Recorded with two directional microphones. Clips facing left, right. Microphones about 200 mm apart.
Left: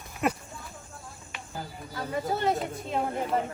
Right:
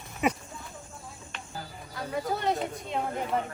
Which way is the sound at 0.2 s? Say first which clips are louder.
Right 1 dB; centre (ahead or behind).